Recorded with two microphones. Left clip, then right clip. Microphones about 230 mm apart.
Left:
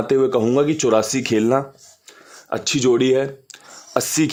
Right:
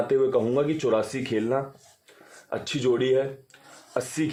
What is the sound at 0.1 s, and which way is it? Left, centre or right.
Speech, left.